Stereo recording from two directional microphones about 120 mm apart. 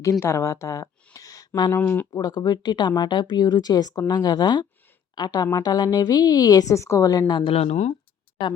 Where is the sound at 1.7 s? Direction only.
20° left (ahead or behind).